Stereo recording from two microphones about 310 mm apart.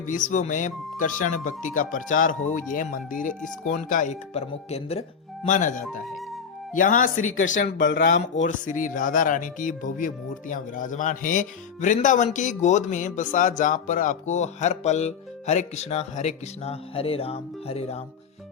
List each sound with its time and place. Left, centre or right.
0.0 s speech: left